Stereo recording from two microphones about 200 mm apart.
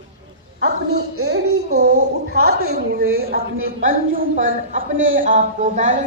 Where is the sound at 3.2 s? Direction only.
50° right (ahead or behind).